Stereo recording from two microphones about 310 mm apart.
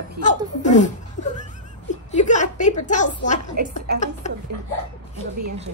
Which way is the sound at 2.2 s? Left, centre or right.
Left.